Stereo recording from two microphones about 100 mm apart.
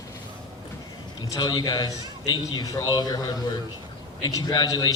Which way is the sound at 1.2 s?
45° left (ahead or behind).